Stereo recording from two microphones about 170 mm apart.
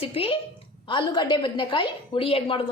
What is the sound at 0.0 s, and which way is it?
A woman's voice, 35° left (ahead or behind).